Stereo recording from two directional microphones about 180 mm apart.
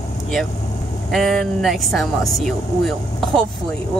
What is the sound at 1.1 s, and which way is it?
Speech, centre (ahead or behind).